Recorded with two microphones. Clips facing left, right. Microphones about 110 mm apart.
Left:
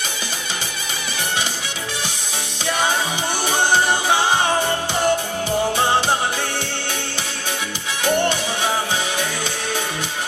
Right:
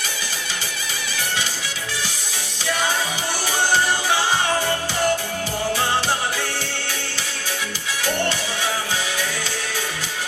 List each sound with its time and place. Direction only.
4.2 s music: 20° left (ahead or behind)